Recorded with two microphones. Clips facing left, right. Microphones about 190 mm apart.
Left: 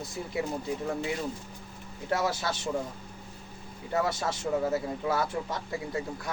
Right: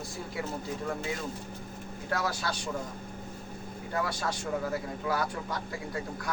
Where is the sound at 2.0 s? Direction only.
25° left (ahead or behind).